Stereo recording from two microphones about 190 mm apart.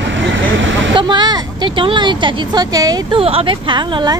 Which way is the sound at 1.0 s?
25° right (ahead or behind).